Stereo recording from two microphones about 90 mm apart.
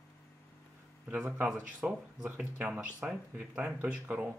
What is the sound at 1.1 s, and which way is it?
Speech, 15° right (ahead or behind).